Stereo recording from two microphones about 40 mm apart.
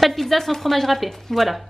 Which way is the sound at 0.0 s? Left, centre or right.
Centre.